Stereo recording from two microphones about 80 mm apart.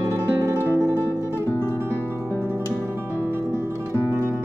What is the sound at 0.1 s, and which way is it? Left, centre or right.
Music, right.